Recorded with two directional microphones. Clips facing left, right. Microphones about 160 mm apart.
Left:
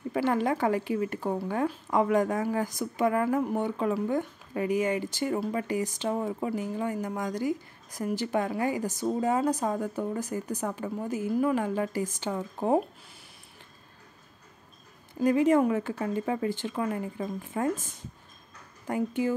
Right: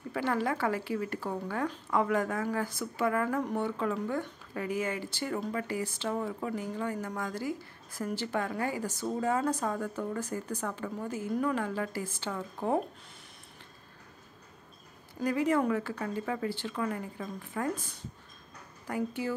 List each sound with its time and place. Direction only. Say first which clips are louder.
0.1 s speech: left 4 dB; 20° left (ahead or behind)
15.2 s speech: left 5 dB; 20° left (ahead or behind)
18.9 s speech: left 5 dB; 20° left (ahead or behind)